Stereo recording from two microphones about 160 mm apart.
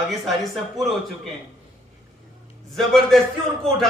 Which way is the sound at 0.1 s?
Centre (ahead or behind).